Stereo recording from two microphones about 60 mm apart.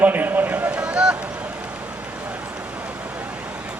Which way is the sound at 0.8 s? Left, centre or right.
Centre.